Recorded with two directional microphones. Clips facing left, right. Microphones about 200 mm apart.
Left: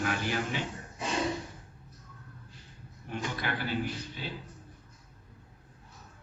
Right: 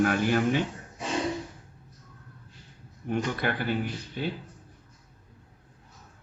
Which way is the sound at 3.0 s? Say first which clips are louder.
Right 7 dB; 55° right (ahead or behind).